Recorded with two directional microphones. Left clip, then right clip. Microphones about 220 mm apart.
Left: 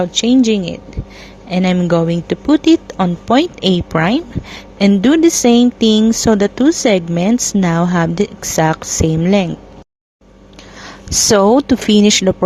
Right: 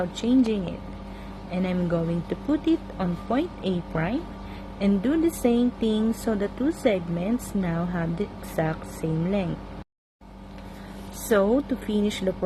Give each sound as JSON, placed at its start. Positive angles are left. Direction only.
{"t": 0.0, "sound": "a woman's voice", "side_deg": 40}
{"t": 11.3, "sound": "speech", "side_deg": 45}